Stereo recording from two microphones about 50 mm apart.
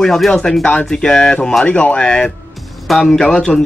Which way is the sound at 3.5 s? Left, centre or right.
Left.